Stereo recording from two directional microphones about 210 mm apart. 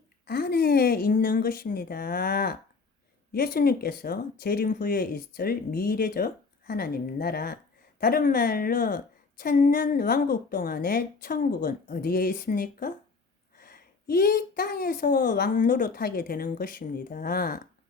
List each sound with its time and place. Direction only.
0.3 s a woman's voice: 50° left (ahead or behind)